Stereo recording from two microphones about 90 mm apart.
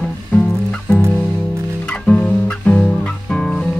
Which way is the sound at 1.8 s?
10° left (ahead or behind).